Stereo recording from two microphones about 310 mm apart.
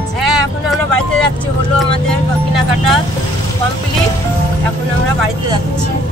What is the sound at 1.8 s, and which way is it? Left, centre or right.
Speech, centre.